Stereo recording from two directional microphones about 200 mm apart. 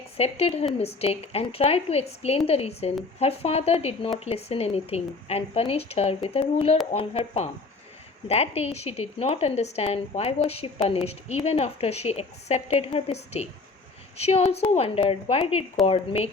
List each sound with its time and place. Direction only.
0.2 s speech: 30° left (ahead or behind)